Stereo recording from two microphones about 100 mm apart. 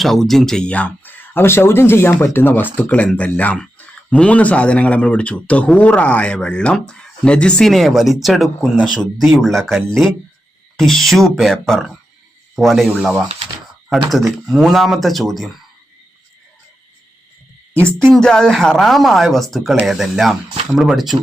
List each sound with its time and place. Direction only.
0.0 s speech: centre (ahead or behind)
18.1 s speech: 5° left (ahead or behind)